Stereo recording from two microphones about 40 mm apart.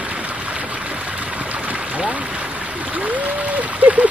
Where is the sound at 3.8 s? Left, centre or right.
Right.